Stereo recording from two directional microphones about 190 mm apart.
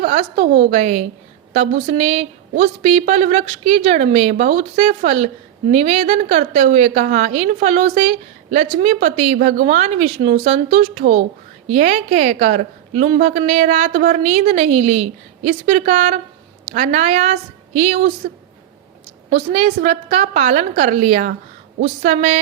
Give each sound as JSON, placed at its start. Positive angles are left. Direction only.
{"t": 0.0, "sound": "a woman's voice", "side_deg": -35}
{"t": 19.3, "sound": "a woman's voice", "side_deg": -35}